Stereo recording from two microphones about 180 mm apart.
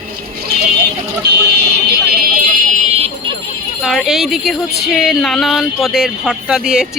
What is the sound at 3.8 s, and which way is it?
Speech, centre (ahead or behind).